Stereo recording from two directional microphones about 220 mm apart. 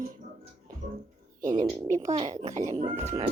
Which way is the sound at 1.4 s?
35° right (ahead or behind).